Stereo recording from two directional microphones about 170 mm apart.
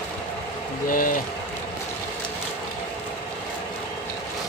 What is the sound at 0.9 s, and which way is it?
Speech, 55° left (ahead or behind).